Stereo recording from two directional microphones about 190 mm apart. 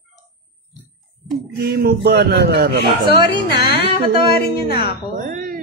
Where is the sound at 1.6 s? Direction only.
55° right (ahead or behind).